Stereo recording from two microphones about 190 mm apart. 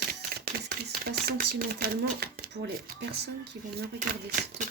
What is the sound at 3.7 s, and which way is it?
Speech, 50° right (ahead or behind).